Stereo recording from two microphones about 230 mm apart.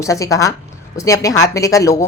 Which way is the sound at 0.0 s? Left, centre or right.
Centre.